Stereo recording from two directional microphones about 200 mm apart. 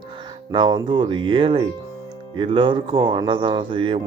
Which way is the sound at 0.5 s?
20° right (ahead or behind).